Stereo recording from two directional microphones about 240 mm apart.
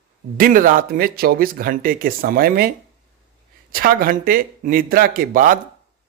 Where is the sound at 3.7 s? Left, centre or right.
Right.